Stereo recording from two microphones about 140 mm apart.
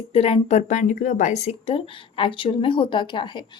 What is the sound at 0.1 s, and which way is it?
Speech, 45° left (ahead or behind).